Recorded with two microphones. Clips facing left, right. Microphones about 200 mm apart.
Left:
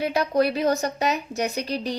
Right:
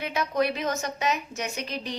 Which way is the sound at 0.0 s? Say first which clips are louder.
Left 5 dB; 35° left (ahead or behind).